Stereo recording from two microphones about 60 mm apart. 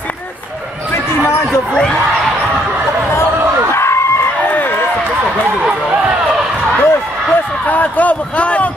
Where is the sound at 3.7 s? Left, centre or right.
Left.